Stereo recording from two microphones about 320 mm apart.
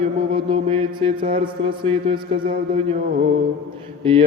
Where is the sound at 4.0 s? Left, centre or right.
Centre.